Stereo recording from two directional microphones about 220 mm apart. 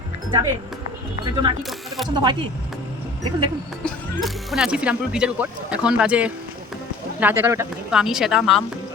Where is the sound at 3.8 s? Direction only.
Centre (ahead or behind).